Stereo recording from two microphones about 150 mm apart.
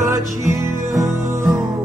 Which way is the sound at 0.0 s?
20° right (ahead or behind).